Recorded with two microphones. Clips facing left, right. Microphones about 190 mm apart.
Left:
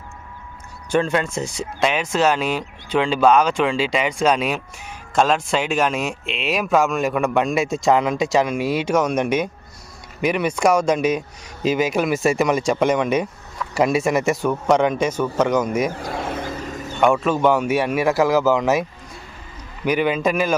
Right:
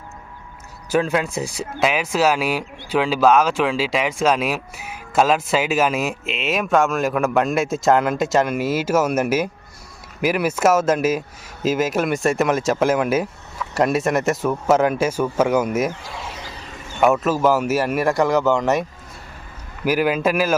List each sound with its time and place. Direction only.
0.9 s speech: 5° right (ahead or behind)
15.9 s vehicle: 50° left (ahead or behind)
17.0 s speech: 5° right (ahead or behind)